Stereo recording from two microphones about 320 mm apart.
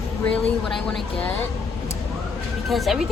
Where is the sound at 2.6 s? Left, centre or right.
Centre.